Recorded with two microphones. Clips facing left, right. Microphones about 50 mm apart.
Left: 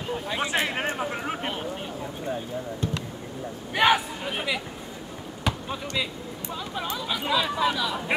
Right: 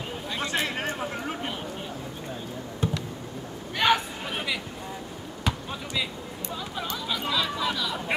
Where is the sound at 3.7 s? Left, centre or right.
Centre.